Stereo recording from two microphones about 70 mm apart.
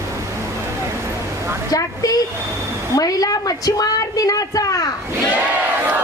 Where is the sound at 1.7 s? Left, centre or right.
Left.